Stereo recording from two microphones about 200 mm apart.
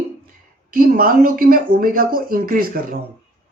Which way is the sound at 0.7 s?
45° right (ahead or behind).